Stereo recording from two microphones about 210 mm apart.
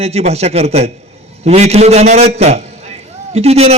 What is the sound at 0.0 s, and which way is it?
A man's voice, 30° right (ahead or behind).